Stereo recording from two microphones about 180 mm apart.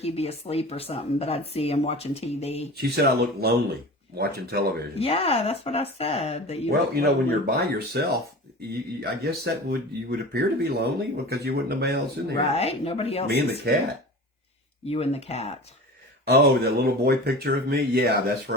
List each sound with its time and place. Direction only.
0.0 s speech: 35° left (ahead or behind)
2.7 s speech: 60° right (ahead or behind)
4.9 s speech: 35° left (ahead or behind)
6.7 s speech: 60° right (ahead or behind)
12.5 s speech: 35° left (ahead or behind)
13.2 s speech: 60° right (ahead or behind)
14.8 s speech: 35° left (ahead or behind)
16.2 s speech: 60° right (ahead or behind)